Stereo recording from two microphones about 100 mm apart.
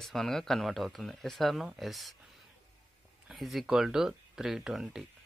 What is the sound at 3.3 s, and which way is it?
Speech, centre (ahead or behind).